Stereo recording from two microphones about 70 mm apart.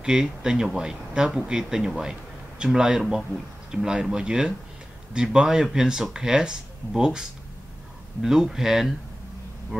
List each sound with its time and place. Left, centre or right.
0.0 s speech: centre